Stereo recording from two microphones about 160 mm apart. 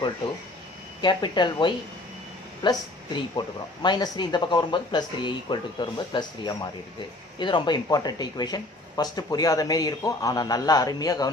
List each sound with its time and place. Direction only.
1.0 s speech: 30° left (ahead or behind)